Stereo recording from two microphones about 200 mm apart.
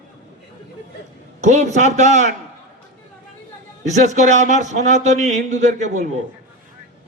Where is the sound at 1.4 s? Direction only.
35° right (ahead or behind).